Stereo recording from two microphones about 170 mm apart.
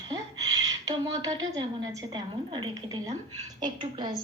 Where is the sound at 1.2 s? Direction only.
20° right (ahead or behind).